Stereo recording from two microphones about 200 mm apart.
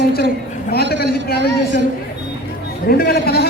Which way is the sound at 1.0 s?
50° left (ahead or behind).